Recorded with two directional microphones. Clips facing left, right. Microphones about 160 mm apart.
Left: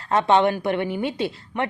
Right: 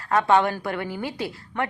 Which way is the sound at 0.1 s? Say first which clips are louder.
Left 2 dB; 20° left (ahead or behind).